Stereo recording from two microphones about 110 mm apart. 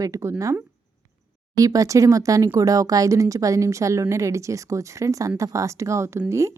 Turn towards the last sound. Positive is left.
turn(degrees=-25)  # may be behind; listen again after turning